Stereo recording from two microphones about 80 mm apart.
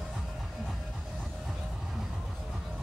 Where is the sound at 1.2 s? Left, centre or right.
Centre.